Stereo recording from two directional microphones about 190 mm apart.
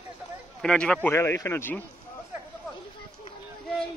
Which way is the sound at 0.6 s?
5° left (ahead or behind).